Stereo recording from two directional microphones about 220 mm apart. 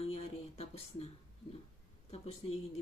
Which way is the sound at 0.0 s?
30° left (ahead or behind).